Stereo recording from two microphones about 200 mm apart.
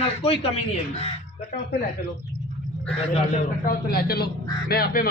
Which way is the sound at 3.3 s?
45° left (ahead or behind).